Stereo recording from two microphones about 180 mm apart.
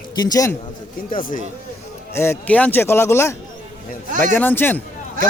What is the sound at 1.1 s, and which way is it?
Speech, 50° left (ahead or behind).